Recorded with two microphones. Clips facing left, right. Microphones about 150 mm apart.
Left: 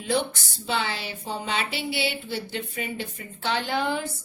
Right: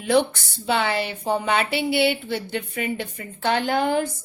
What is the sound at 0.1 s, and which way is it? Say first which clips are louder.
A woman's voice: right 6 dB; 60° right (ahead or behind).